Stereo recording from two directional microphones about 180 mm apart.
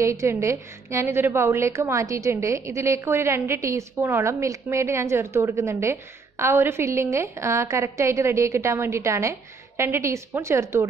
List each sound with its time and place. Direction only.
0.0 s a woman's voice: 15° right (ahead or behind)